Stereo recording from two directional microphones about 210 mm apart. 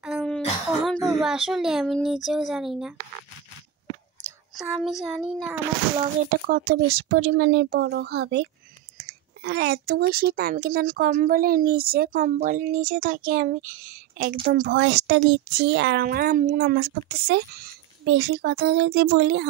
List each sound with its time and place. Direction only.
0.0 s a sound: centre (ahead or behind)
0.8 s speech: centre (ahead or behind)
4.6 s speech: centre (ahead or behind)
6.4 s a woman's voice: 45° right (ahead or behind)